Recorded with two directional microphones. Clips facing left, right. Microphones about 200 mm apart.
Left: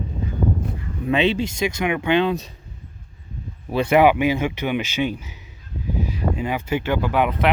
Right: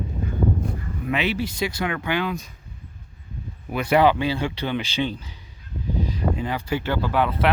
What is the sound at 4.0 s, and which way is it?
Speech, 15° left (ahead or behind).